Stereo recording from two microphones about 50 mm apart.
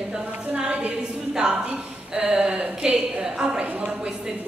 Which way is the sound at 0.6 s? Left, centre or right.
Right.